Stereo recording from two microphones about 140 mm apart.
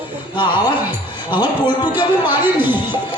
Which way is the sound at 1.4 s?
30° left (ahead or behind).